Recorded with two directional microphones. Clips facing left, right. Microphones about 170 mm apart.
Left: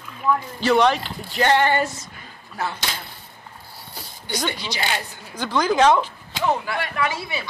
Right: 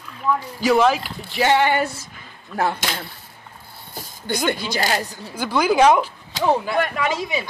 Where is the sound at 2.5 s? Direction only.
55° right (ahead or behind).